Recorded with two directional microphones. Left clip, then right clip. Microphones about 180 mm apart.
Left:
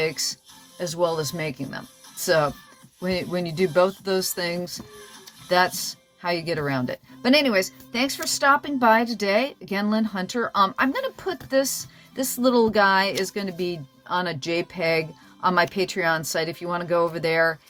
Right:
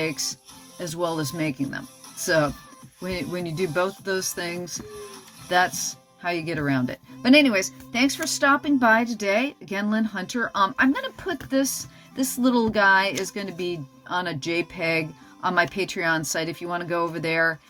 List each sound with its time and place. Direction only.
0.8 s a woman's voice: 30° left (ahead or behind)